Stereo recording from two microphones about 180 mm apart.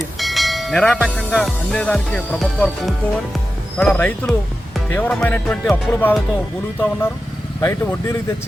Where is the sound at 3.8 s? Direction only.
10° left (ahead or behind).